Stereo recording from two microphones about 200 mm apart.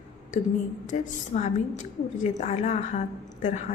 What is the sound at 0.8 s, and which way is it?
A woman's voice, 35° left (ahead or behind).